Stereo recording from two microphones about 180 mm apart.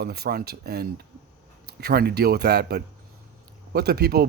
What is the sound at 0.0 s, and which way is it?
Speech, 60° right (ahead or behind).